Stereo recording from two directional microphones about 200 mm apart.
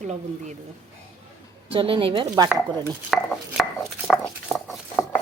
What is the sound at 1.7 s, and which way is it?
Speech, 25° right (ahead or behind).